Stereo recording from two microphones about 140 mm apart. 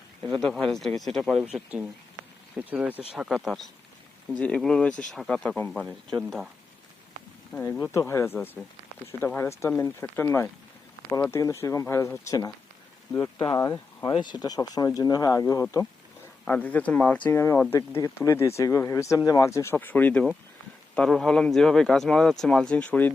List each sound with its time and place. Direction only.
0.2 s speech: 5° left (ahead or behind)
5.8 s speech: 5° right (ahead or behind)
7.6 s speech: 15° left (ahead or behind)
16.5 s speech: 10° left (ahead or behind)